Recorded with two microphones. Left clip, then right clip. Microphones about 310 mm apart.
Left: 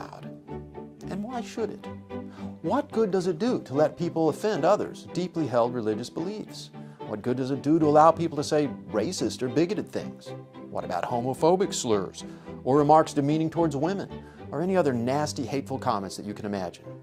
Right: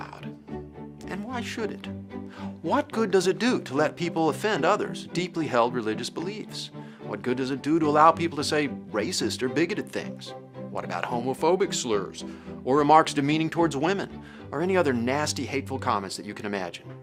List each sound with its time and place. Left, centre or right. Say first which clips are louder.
1.0 s music: right 1 dB; left
2.4 s speech: right 2 dB; left
10.8 s speech: left 1 dB; left
12.8 s speech: right 2 dB; left
13.6 s speech: right 2 dB; left